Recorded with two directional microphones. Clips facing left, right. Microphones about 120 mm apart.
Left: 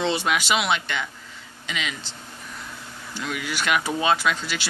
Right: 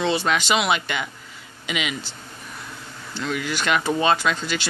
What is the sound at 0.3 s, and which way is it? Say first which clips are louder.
Speech: right 2 dB; 5° left (ahead or behind).